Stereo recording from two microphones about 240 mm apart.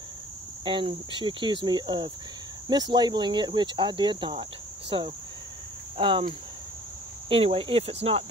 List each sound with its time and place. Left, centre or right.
0.7 s speech: right
5.9 s cricket: right
7.2 s speech: right